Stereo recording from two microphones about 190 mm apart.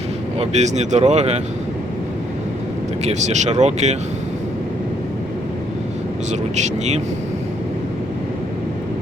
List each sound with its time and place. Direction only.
0.3 s speech: 35° right (ahead or behind)
3.0 s speech: 35° right (ahead or behind)
6.6 s speech: 35° right (ahead or behind)